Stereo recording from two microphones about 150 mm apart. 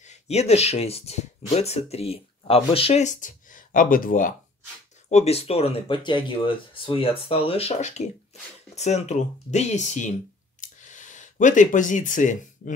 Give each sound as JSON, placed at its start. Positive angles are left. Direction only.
{"t": 0.0, "sound": "speech", "side_deg": 50}
{"t": 5.1, "sound": "speech", "side_deg": 45}
{"t": 10.6, "sound": "a sound", "side_deg": 55}